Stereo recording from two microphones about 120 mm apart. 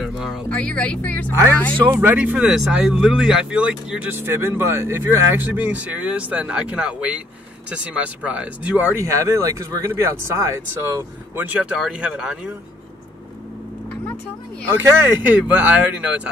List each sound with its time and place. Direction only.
0.0 s a sound: 5° right (ahead or behind)
0.5 s speech: 10° left (ahead or behind)
1.9 s speech: 15° right (ahead or behind)
8.9 s speech: 25° right (ahead or behind); by 12.5 s 5° right (ahead or behind)
14.8 s speech: 20° right (ahead or behind)